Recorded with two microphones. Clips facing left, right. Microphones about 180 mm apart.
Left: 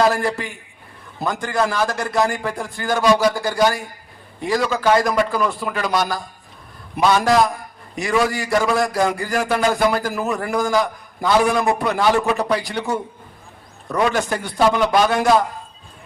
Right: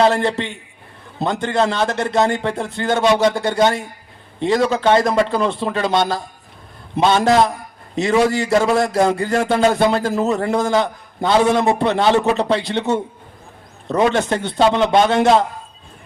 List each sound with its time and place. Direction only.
0.0 s a man's voice: 25° right (ahead or behind)